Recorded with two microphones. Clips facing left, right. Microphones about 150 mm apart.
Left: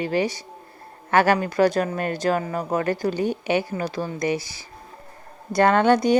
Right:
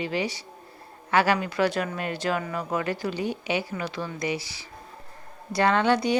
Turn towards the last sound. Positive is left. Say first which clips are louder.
# left 5 dB
turn(degrees=45)  # may be behind; listen again after turning